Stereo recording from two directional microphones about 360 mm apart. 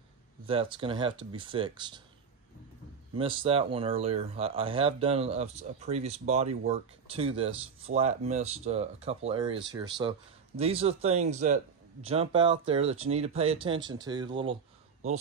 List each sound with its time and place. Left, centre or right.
0.5 s speech: centre
3.2 s speech: centre